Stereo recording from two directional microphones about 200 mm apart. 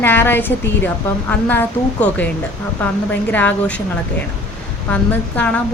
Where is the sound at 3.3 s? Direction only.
10° left (ahead or behind).